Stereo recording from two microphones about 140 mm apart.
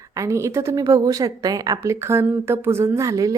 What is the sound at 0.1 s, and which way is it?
Speech, 20° right (ahead or behind).